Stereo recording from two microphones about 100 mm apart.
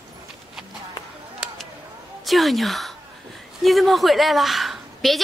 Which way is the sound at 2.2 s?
Centre (ahead or behind).